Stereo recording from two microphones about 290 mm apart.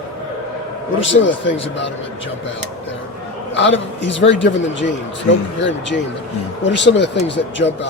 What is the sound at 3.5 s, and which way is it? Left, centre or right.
A man's voice, left.